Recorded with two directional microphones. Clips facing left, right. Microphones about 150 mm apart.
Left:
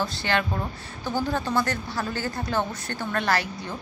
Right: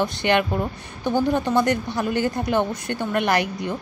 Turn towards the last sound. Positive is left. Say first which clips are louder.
# right 4 dB
turn(degrees=-20)  # may be behind; listen again after turning